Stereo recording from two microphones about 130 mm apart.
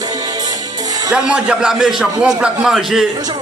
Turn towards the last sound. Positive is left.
turn(degrees=-5)  # may be behind; listen again after turning